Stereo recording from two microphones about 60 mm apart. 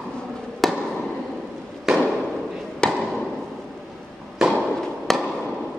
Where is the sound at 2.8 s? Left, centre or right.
Centre.